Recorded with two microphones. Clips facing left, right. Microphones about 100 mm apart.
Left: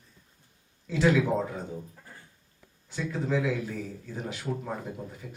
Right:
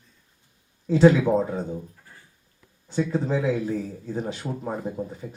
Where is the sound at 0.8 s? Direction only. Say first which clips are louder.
Right 7 dB; 30° right (ahead or behind).